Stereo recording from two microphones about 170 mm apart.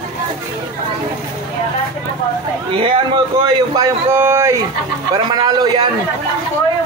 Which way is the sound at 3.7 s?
15° right (ahead or behind).